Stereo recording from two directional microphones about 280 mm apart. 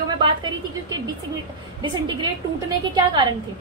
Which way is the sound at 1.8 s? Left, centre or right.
Centre.